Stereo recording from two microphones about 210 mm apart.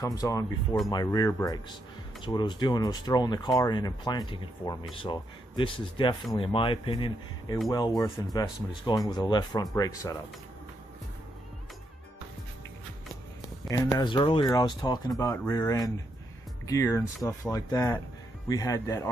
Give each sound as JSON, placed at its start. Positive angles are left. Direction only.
{"t": 0.0, "sound": "speech", "side_deg": 15}
{"t": 13.7, "sound": "speech", "side_deg": 20}